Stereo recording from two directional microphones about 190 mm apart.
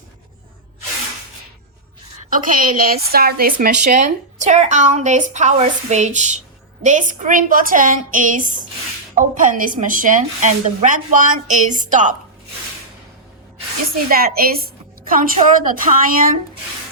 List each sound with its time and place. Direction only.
2.3 s a woman's voice: 45° right (ahead or behind)
14.1 s a woman's voice: 50° right (ahead or behind)